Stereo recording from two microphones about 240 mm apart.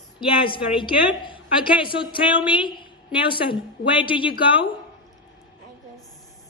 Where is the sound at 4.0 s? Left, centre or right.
Left.